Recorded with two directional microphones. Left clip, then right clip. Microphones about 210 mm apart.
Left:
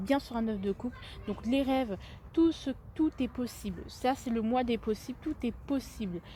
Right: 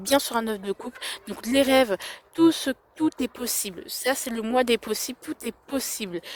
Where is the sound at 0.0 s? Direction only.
50° right (ahead or behind).